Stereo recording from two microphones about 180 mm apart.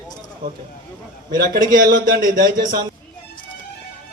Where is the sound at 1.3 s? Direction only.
55° right (ahead or behind).